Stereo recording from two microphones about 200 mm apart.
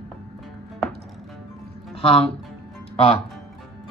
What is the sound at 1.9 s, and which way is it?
Music, 25° left (ahead or behind).